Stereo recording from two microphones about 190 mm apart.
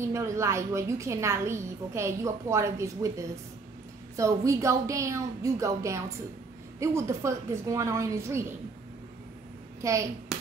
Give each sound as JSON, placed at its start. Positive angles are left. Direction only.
{"t": 0.0, "sound": "a woman's voice", "side_deg": -15}
{"t": 9.8, "sound": "a child's voice", "side_deg": -15}